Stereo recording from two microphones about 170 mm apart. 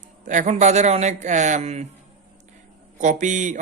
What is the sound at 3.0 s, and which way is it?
Speech, 45° right (ahead or behind).